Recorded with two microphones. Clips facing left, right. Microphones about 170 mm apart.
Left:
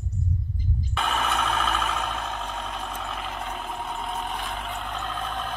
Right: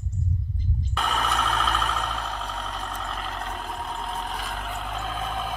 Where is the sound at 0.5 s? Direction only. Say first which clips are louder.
Even; centre (ahead or behind).